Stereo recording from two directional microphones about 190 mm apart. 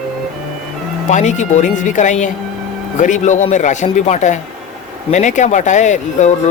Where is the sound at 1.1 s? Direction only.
40° left (ahead or behind).